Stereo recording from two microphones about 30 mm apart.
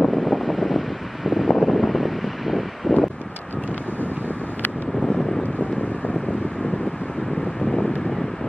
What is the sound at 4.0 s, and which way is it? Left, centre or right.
Vehicle, left.